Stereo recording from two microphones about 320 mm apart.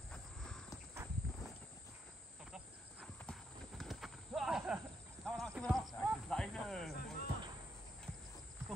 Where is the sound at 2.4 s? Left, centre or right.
Centre.